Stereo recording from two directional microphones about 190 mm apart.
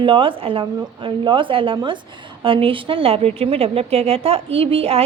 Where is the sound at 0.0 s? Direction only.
25° right (ahead or behind).